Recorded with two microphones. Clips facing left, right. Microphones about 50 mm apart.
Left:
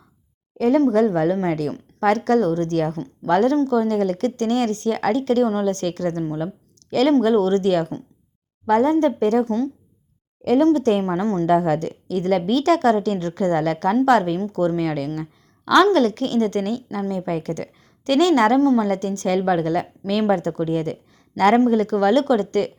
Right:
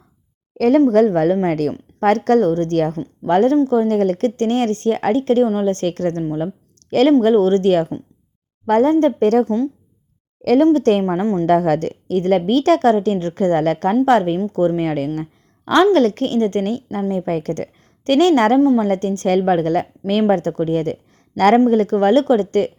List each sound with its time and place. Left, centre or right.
0.9 s a woman's voice: right
10.8 s a woman's voice: right
11.1 s a woman's voice: centre
11.4 s a woman's voice: right